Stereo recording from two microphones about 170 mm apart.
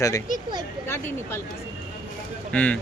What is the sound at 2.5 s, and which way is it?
Speech, 5° left (ahead or behind).